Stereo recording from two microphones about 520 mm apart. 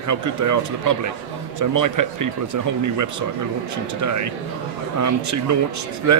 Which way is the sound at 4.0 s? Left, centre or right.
Right.